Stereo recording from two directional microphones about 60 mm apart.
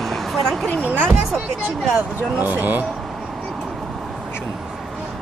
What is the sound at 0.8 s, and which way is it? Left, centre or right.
Music, right.